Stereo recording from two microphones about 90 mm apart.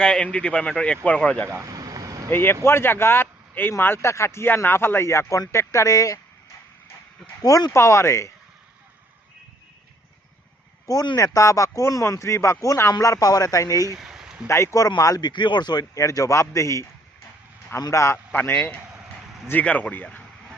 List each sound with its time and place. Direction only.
0.0 s speech: 10° left (ahead or behind)
1.6 s vehicle: 45° right (ahead or behind)
2.3 s speech: 25° left (ahead or behind)
7.4 s speech: 40° left (ahead or behind)
11.2 s speech: 40° left (ahead or behind)
14.0 s a sound: 5° right (ahead or behind)
14.4 s speech: 30° left (ahead or behind)
15.3 s speech: 60° left (ahead or behind); by 20.1 s 20° left (ahead or behind)